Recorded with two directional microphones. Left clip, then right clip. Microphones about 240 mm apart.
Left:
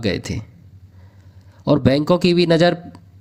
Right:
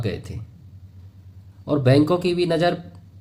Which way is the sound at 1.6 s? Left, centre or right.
Left.